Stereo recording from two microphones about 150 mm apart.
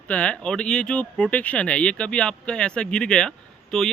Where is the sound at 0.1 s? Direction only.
10° left (ahead or behind).